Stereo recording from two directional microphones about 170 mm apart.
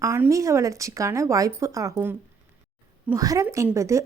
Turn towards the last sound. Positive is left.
turn(degrees=-15)  # may be behind; listen again after turning